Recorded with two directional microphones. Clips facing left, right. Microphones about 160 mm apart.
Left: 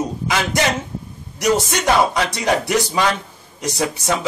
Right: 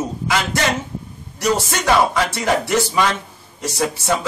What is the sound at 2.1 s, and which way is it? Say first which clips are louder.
Speech: even; 15° left (ahead or behind).